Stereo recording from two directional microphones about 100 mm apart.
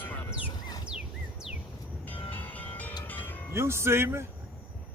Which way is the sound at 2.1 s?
15° left (ahead or behind).